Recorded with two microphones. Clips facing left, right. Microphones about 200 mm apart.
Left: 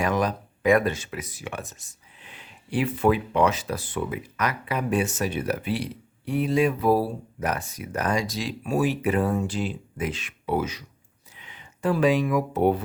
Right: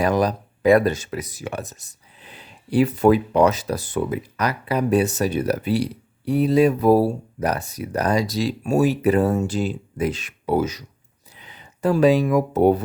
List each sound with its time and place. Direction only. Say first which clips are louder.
0.0 s speech: right 5 dB; 35° right (ahead or behind)